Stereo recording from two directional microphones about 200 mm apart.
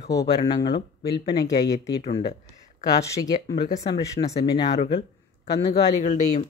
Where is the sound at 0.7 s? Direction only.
55° left (ahead or behind).